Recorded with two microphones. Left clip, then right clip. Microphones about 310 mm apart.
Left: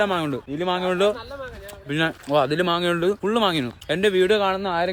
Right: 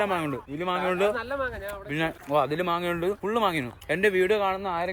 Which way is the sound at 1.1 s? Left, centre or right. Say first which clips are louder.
Right 5 dB; right.